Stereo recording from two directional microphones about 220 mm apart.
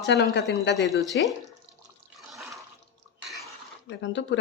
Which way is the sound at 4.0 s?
55° left (ahead or behind).